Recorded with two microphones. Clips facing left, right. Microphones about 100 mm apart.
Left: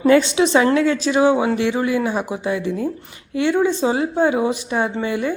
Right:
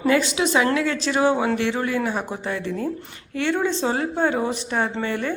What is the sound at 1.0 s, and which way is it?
Speech, 15° left (ahead or behind).